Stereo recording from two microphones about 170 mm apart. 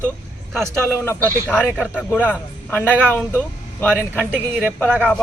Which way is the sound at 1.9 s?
10° left (ahead or behind).